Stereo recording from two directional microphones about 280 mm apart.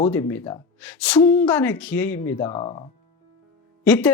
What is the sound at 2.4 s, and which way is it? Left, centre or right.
Speech, left.